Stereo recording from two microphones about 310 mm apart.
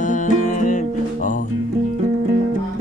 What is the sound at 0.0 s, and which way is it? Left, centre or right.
Music, left.